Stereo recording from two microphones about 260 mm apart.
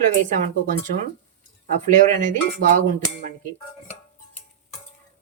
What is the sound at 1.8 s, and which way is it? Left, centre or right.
Speech, right.